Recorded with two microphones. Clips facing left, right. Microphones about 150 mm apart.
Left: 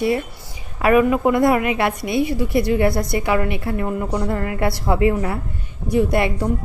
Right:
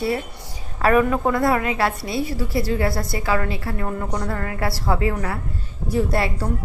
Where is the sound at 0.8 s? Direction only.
10° left (ahead or behind).